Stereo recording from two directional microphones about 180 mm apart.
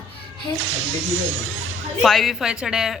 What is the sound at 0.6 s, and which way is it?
Speech, 90° right.